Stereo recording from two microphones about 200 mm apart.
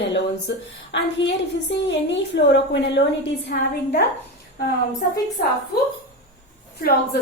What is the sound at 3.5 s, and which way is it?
Speech, 45° left (ahead or behind).